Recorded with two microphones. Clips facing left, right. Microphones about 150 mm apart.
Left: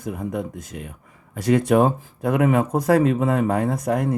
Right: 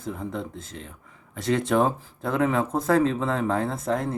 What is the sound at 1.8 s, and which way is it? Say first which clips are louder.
Speech: left 5 dB; 15° left (ahead or behind).